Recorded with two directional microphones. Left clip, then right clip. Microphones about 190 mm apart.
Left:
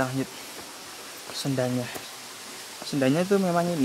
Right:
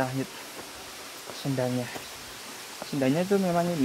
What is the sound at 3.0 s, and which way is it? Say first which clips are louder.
Speech: left 2 dB; 20° left (ahead or behind).